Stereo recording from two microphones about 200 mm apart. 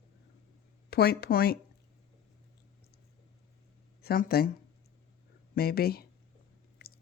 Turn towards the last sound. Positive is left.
turn(degrees=50)  # may be behind; listen again after turning